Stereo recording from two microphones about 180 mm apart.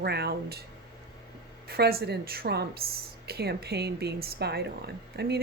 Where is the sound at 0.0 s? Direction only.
65° right (ahead or behind).